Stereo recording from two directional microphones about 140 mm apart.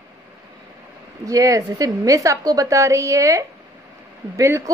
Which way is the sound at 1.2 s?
25° right (ahead or behind).